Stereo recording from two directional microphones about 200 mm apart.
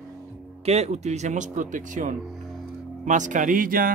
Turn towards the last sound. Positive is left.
turn(degrees=-45)  # may be behind; listen again after turning